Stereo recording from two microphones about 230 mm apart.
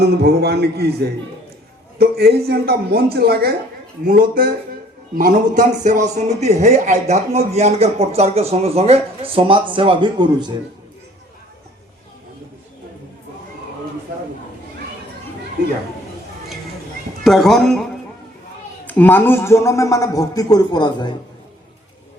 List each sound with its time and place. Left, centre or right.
0.0 s speech: right; by 10.6 s centre
17.2 s a man's voice: centre